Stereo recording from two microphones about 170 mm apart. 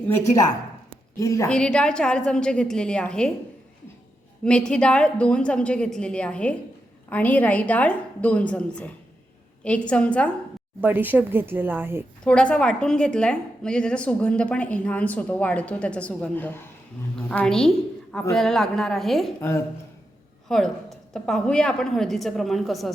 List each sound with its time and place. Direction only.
1.2 s a woman's voice: 20° left (ahead or behind)
1.5 s a woman's voice: 5° left (ahead or behind)
4.4 s a woman's voice: 5° left (ahead or behind)
10.8 s speech: 10° right (ahead or behind)
12.2 s a woman's voice: 5° left (ahead or behind)
19.4 s a woman's voice: 15° left (ahead or behind)
20.5 s a woman's voice: centre (ahead or behind)